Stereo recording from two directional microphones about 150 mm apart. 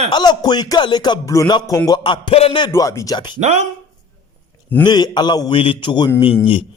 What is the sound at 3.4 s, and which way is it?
Speech, 50° right (ahead or behind).